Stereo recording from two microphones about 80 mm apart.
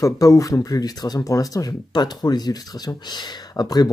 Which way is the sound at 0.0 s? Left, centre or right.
Left.